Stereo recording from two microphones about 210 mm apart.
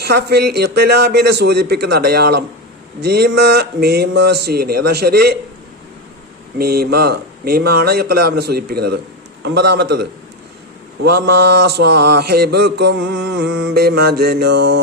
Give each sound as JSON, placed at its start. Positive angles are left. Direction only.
{"t": 0.0, "sound": "mantra", "side_deg": -50}
{"t": 6.6, "sound": "mantra", "side_deg": -50}